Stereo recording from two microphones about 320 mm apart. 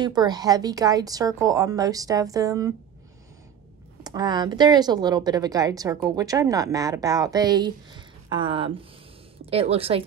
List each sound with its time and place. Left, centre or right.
0.0 s speech: centre
4.0 s speech: centre